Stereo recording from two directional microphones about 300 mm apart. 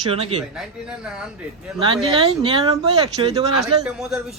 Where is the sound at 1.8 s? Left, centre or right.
Centre.